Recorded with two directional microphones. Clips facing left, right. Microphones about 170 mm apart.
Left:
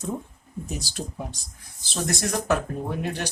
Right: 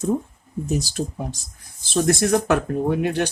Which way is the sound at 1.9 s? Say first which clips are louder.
Right 9 dB; 60° right (ahead or behind).